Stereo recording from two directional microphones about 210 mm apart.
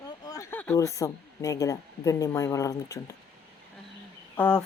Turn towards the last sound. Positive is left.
turn(degrees=5)  # may be behind; listen again after turning